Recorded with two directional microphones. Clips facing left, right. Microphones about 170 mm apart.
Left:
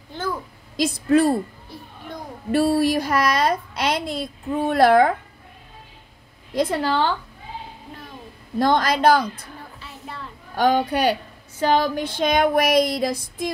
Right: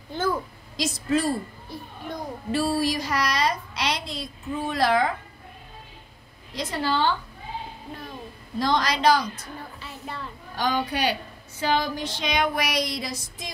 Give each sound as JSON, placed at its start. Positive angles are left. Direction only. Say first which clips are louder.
{"t": 0.7, "sound": "a woman's voice", "louder": "left 7 dB", "side_deg": 55}
{"t": 2.5, "sound": "a woman's voice", "louder": "left 6 dB", "side_deg": 60}
{"t": 6.5, "sound": "child singing", "louder": "left 6 dB", "side_deg": 55}
{"t": 8.5, "sound": "a woman's voice", "louder": "left 5 dB", "side_deg": 55}
{"t": 10.5, "sound": "child singing", "louder": "left 7 dB", "side_deg": 55}